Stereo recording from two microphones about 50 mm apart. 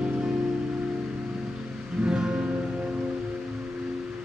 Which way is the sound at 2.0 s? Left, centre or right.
Centre.